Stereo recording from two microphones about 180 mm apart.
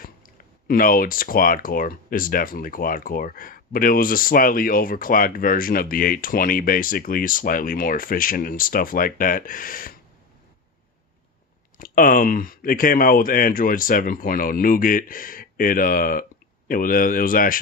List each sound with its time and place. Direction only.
0.7 s speech: 50° left (ahead or behind)
11.8 s speech: 50° left (ahead or behind)